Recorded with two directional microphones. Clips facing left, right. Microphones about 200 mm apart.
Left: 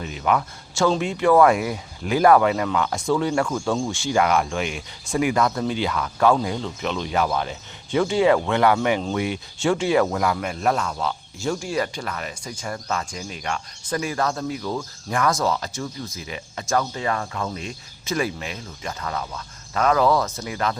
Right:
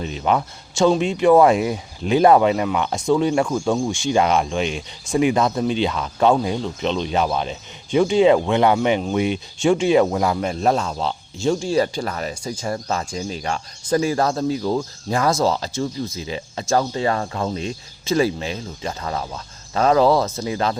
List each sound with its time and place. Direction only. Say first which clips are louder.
0.0 s speech: right 2 dB; 25° right (ahead or behind)